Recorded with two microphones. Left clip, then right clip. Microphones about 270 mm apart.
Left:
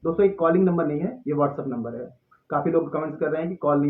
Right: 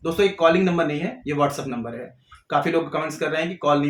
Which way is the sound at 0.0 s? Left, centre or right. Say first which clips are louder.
Right 2 dB; right.